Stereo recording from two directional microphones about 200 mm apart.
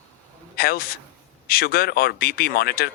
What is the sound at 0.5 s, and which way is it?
A man's voice, 50° left (ahead or behind).